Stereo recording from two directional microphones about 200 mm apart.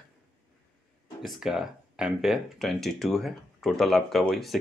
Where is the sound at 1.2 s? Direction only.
Centre (ahead or behind).